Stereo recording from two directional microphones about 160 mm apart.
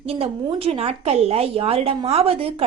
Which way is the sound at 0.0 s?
35° right (ahead or behind).